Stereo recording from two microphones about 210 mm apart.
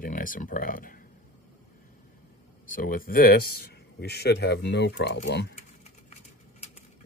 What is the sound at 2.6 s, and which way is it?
Speech, 40° left (ahead or behind).